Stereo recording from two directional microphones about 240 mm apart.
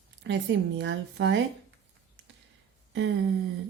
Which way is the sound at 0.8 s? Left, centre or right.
Right.